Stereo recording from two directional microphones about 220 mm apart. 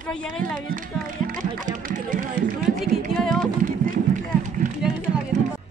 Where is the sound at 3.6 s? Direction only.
40° right (ahead or behind).